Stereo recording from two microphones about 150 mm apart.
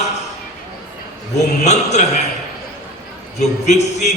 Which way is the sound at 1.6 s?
50° left (ahead or behind).